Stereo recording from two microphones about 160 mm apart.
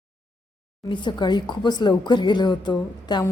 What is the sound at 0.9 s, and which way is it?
A woman's voice, 30° left (ahead or behind).